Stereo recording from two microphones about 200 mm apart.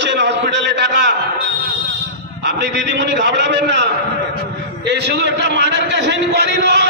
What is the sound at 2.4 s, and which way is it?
A man's voice, 60° right (ahead or behind).